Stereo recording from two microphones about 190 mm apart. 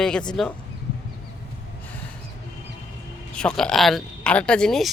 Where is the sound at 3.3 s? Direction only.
5° left (ahead or behind).